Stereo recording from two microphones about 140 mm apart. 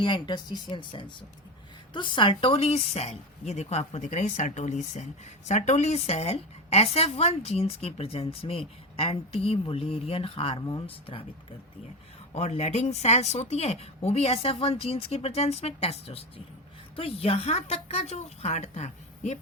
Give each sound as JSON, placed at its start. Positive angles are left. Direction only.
{"t": 0.0, "sound": "a woman's voice", "side_deg": 35}
{"t": 12.3, "sound": "a woman's voice", "side_deg": 50}